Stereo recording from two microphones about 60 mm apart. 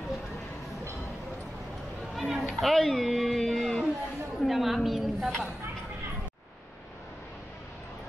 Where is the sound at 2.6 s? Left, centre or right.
Centre.